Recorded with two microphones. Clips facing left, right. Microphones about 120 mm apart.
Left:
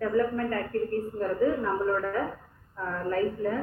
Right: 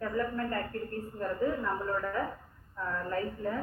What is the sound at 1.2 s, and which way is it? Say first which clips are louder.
A man's voice: left 4 dB; 15° left (ahead or behind).